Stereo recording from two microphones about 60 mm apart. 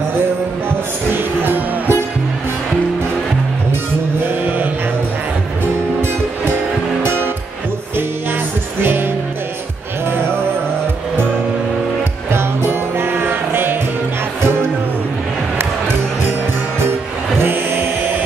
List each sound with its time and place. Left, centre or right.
0.7 s music: right
8.8 s music: right
12.3 s music: right
17.4 s a sound: right